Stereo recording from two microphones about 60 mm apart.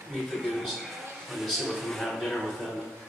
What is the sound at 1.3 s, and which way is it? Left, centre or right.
Speech, centre.